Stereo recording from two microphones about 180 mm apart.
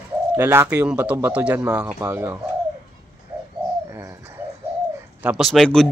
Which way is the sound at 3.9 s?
15° right (ahead or behind).